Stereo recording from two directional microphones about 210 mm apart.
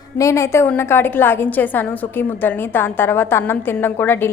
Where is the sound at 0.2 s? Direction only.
15° left (ahead or behind).